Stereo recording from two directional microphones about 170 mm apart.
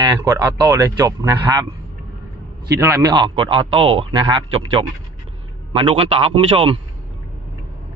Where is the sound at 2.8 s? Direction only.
15° right (ahead or behind); by 6.8 s 30° right (ahead or behind).